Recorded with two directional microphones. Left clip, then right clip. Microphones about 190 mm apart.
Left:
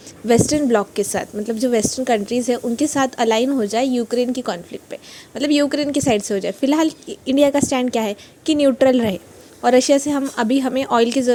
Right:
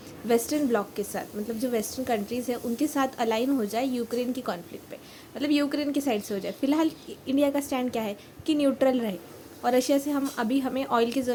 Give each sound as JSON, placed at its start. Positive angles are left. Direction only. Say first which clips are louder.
{"t": 0.3, "sound": "a woman's voice", "louder": "left 9 dB", "side_deg": 40}